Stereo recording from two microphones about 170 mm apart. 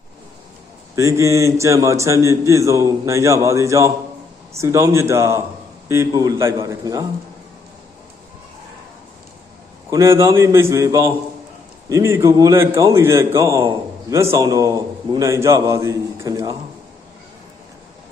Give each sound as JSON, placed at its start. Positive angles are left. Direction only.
{"t": 0.9, "sound": "a man's voice", "side_deg": -15}
{"t": 9.9, "sound": "a man's voice", "side_deg": -15}